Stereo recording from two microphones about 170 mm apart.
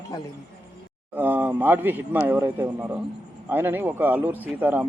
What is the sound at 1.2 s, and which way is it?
A man's voice, 10° right (ahead or behind).